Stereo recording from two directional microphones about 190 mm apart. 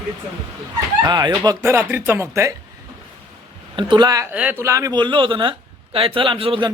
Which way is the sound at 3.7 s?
25° right (ahead or behind).